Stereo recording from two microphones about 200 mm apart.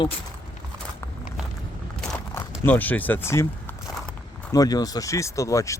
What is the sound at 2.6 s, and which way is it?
Speech, 10° left (ahead or behind).